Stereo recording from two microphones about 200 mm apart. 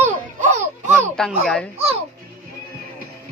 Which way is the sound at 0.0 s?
35° right (ahead or behind).